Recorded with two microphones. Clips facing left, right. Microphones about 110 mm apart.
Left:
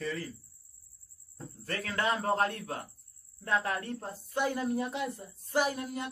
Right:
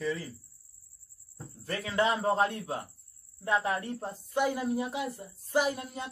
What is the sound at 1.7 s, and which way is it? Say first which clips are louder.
A man's voice: right 3 dB; 15° right (ahead or behind).